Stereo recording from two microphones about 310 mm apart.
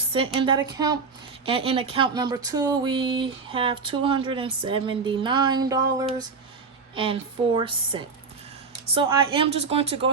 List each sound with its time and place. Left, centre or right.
0.1 s speech: centre